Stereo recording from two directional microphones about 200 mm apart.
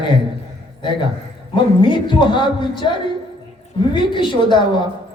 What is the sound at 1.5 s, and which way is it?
A man's voice, 25° left (ahead or behind).